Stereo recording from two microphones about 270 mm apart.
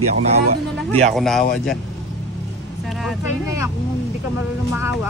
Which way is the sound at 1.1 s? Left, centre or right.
Centre.